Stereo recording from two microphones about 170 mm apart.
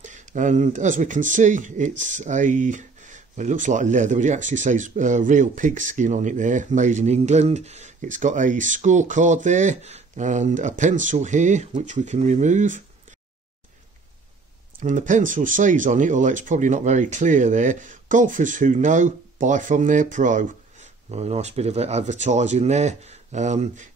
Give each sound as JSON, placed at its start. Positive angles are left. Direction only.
{"t": 0.0, "sound": "speech", "side_deg": -45}
{"t": 14.8, "sound": "speech", "side_deg": -50}